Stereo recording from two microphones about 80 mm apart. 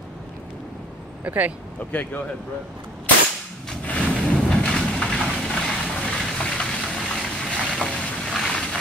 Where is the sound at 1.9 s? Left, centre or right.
Centre.